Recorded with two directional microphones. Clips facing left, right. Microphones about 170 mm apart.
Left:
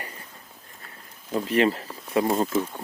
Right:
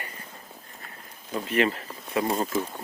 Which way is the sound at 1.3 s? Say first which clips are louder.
Left 3 dB; 35° left (ahead or behind).